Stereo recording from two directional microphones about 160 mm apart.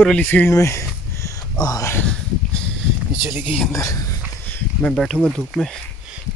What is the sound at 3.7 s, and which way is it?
Speech, 20° left (ahead or behind).